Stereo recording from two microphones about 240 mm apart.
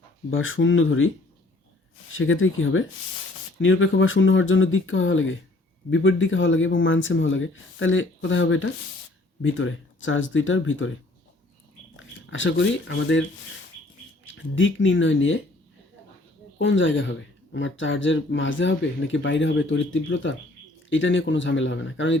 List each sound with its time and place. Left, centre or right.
0.3 s speech: left
2.1 s speech: left
11.9 s speech: left
14.3 s speech: left
16.6 s speech: left